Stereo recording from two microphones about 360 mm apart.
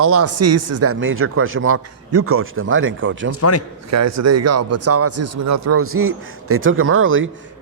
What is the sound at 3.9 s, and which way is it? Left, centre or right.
Speech, right.